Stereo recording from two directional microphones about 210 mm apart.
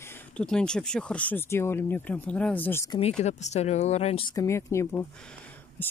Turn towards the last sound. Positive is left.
turn(degrees=5)  # may be behind; listen again after turning